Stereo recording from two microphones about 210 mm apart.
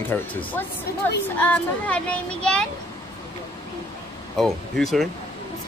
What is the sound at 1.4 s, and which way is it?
A woman's voice, 5° left (ahead or behind).